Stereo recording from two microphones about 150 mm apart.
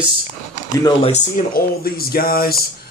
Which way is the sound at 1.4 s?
80° left.